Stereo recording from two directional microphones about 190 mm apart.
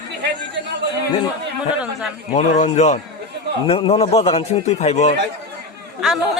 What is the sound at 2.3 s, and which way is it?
A man's voice, 35° left (ahead or behind).